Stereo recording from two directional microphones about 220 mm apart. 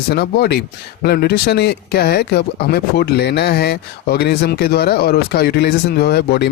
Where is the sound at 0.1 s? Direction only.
45° left (ahead or behind).